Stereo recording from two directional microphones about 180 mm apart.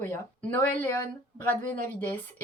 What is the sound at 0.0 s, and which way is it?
Speech, 10° left (ahead or behind).